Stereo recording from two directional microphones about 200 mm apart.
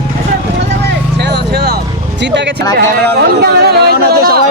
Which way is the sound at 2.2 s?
60° right (ahead or behind).